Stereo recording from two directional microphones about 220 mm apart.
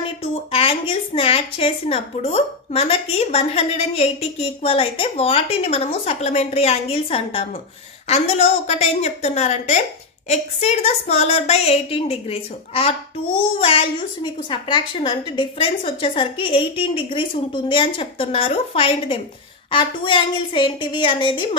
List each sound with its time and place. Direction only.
0.2 s a woman's voice: 25° left (ahead or behind)